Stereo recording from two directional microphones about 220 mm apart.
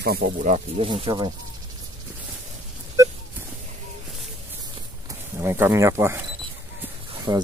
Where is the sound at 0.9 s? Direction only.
20° right (ahead or behind).